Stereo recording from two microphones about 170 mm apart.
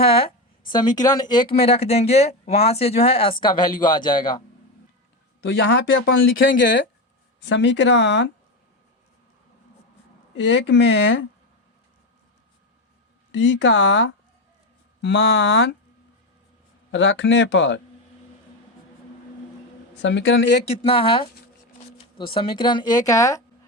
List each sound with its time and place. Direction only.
0.7 s a woman's voice: 25° left (ahead or behind)
5.5 s speech: 90° left
10.3 s speech: 90° left
13.3 s speech: 90° left
16.9 s speech: 90° left
20.0 s speech: 90° left
20.8 s speech: 35° left (ahead or behind)
22.4 s a woman's voice: 30° left (ahead or behind)